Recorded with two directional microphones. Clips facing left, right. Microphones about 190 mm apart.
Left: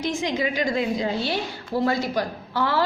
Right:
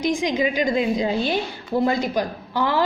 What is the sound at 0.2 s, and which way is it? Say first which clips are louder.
A woman's voice: right 3 dB; 15° right (ahead or behind).